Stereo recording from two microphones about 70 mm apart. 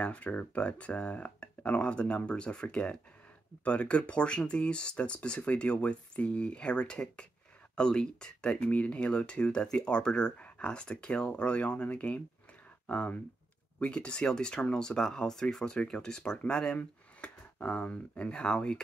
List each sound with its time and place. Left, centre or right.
0.0 s speech: left